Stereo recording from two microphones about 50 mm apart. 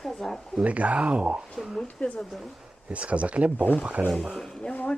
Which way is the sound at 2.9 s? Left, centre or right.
Right.